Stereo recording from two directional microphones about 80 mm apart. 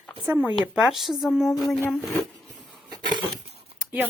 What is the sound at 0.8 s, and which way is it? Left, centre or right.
Speech, centre.